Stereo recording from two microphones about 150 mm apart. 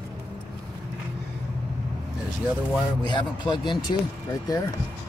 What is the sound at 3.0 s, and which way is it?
Speech, 30° left (ahead or behind).